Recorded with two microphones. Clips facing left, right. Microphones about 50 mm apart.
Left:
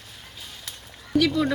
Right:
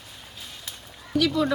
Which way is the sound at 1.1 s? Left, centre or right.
Centre.